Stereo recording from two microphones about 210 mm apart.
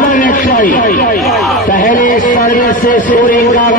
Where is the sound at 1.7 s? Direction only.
40° left (ahead or behind).